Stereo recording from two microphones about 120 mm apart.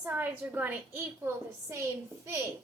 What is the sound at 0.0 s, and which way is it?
A woman's voice, 15° right (ahead or behind).